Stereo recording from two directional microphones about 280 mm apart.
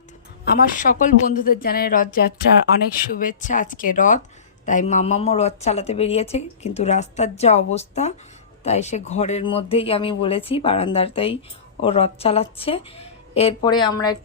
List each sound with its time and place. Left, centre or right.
0.4 s a woman's voice: left